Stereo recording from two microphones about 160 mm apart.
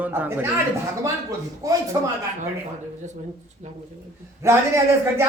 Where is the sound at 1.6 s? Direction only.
20° right (ahead or behind).